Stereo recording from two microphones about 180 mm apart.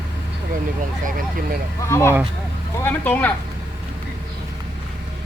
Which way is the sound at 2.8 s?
10° left (ahead or behind).